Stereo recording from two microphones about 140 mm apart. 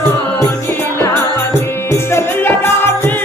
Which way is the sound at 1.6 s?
20° left (ahead or behind).